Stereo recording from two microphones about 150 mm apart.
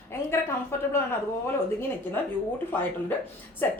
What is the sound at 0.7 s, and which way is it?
Speech, 15° left (ahead or behind).